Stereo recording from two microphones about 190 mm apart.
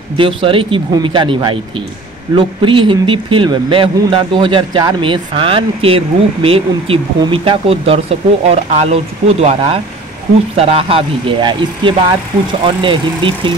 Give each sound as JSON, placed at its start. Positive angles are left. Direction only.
{"t": 0.2, "sound": "speech", "side_deg": -25}